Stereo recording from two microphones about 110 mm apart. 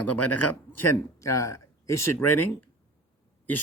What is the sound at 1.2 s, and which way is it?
Speech, 30° left (ahead or behind).